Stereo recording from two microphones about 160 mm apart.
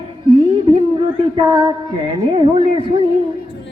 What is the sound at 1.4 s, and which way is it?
A man's voice, 30° right (ahead or behind).